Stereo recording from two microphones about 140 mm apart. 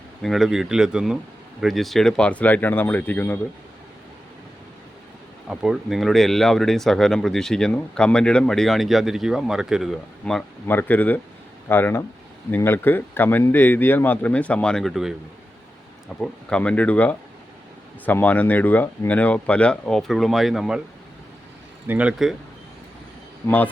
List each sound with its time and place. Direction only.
0.2 s speech: centre (ahead or behind)
5.5 s speech: 5° right (ahead or behind)
10.7 s speech: 15° left (ahead or behind)
16.2 s speech: 5° left (ahead or behind)
21.8 s speech: 10° right (ahead or behind)
23.4 s speech: 15° left (ahead or behind)